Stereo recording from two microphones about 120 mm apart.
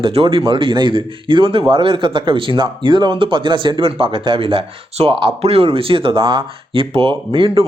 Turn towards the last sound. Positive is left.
turn(degrees=-45)  # may be behind; listen again after turning